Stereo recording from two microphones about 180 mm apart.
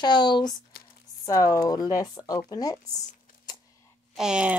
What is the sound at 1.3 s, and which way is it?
Speech, 20° left (ahead or behind).